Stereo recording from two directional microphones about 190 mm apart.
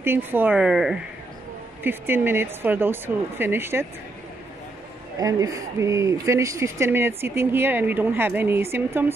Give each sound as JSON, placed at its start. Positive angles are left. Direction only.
{"t": 0.0, "sound": "speech", "side_deg": -10}
{"t": 5.2, "sound": "speech", "side_deg": -20}